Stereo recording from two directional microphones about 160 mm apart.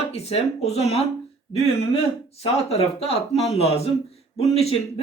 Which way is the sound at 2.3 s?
40° left (ahead or behind).